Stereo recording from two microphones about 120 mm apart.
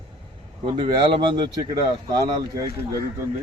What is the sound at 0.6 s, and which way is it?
Speech, 45° right (ahead or behind).